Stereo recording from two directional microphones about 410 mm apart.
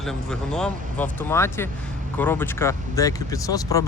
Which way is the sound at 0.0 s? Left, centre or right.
Centre.